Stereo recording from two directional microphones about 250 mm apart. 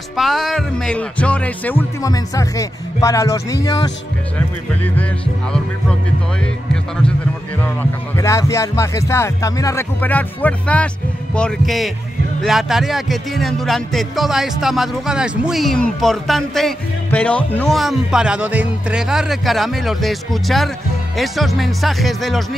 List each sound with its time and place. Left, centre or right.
0.1 s speech: centre
4.6 s speech: centre
8.2 s speech: centre